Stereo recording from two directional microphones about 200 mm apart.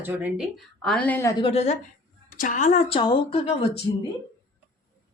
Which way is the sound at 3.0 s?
25° left (ahead or behind).